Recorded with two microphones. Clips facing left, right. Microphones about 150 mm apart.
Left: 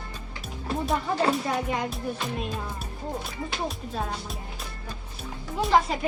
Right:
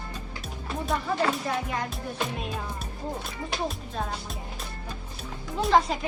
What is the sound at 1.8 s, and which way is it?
Speech, centre (ahead or behind).